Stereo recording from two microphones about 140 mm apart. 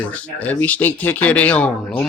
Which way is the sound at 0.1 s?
10° left (ahead or behind).